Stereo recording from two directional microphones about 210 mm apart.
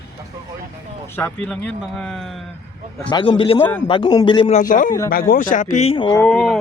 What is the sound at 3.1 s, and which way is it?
A man's voice, 25° left (ahead or behind).